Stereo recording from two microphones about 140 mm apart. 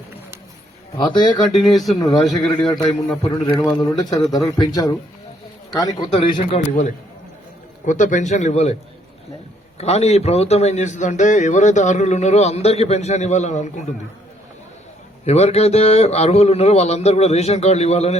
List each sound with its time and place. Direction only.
0.9 s speech: 35° left (ahead or behind)
1.5 s a man's voice: centre (ahead or behind)
3.3 s speech: 30° left (ahead or behind)
5.7 s speech: 25° left (ahead or behind)
6.1 s a man's voice: 45° left (ahead or behind)
6.5 s a man's voice: 60° left (ahead or behind)
9.7 s a man's voice: 50° left (ahead or behind)
15.2 s a man's voice: 50° left (ahead or behind)